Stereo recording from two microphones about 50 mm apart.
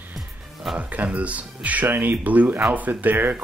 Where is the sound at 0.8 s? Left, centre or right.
Right.